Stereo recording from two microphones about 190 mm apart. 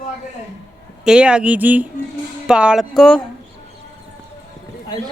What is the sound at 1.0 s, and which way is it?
Speech, 5° right (ahead or behind).